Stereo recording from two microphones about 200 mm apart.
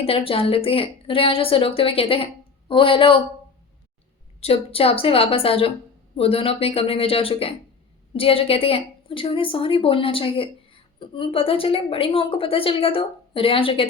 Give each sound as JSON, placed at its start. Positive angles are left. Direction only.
{"t": 0.0, "sound": "a woman's voice", "side_deg": 30}
{"t": 4.4, "sound": "a woman's voice", "side_deg": 30}